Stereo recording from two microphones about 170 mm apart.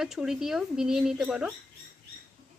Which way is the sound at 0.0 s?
5° right (ahead or behind).